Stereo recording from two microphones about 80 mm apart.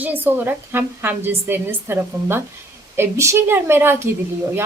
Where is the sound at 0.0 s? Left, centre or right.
Right.